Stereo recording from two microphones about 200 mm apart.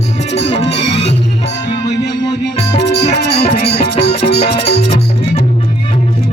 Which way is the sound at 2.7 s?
60° left (ahead or behind).